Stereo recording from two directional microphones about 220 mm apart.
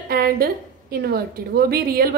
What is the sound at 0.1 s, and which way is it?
A woman's voice, 40° right (ahead or behind).